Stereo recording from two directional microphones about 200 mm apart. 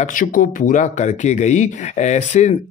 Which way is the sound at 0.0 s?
40° left (ahead or behind).